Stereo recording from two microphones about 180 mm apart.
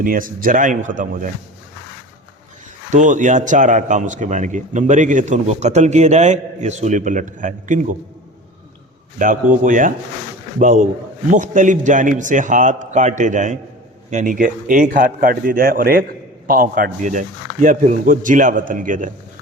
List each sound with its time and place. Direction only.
0.0 s speech: 50° right (ahead or behind)
2.9 s speech: 45° right (ahead or behind)
9.1 s speech: 45° right (ahead or behind)